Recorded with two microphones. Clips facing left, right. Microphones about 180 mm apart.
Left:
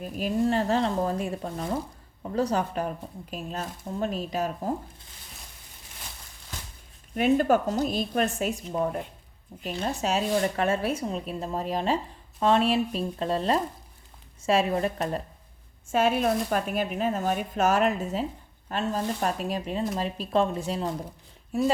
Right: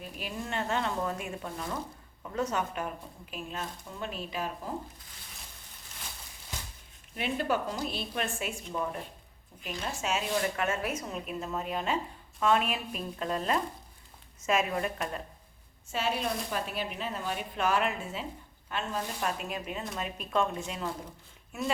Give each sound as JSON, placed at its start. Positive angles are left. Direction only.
{"t": 0.0, "sound": "speech", "side_deg": 40}
{"t": 7.2, "sound": "speech", "side_deg": 45}
{"t": 15.9, "sound": "speech", "side_deg": 50}